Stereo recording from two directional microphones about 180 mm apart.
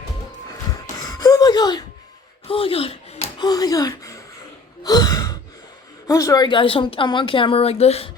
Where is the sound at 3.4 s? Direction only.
20° left (ahead or behind).